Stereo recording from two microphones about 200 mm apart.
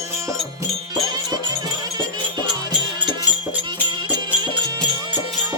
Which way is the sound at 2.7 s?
20° right (ahead or behind).